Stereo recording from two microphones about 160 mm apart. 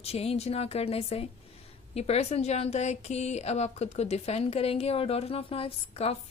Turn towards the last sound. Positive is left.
turn(degrees=35)  # may be behind; listen again after turning